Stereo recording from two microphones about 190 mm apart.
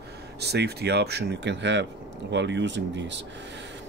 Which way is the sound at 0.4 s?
60° right (ahead or behind).